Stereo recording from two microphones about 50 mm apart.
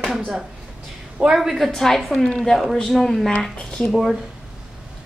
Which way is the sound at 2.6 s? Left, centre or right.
Centre.